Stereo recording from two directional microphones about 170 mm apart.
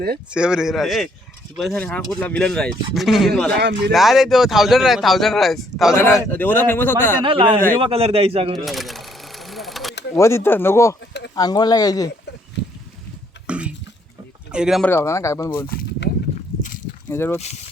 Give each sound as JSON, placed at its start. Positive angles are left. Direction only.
{"t": 0.3, "sound": "speech", "side_deg": -5}
{"t": 3.6, "sound": "speech", "side_deg": -90}
{"t": 3.9, "sound": "speech", "side_deg": 0}
{"t": 6.0, "sound": "a man's voice", "side_deg": 10}
{"t": 7.2, "sound": "a man's voice", "side_deg": -30}
{"t": 8.5, "sound": "sewing machine", "side_deg": 0}
{"t": 10.2, "sound": "a man's voice", "side_deg": 15}
{"t": 13.5, "sound": "a sound", "side_deg": -5}
{"t": 14.5, "sound": "speech", "side_deg": -5}
{"t": 14.8, "sound": "a man's voice", "side_deg": 15}
{"t": 17.1, "sound": "speech", "side_deg": 10}
{"t": 17.3, "sound": "speech", "side_deg": 40}